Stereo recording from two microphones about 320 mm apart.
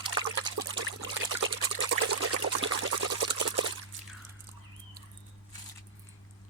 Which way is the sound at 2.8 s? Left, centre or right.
Right.